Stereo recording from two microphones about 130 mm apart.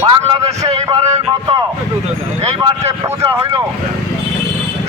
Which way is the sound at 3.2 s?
20° right (ahead or behind).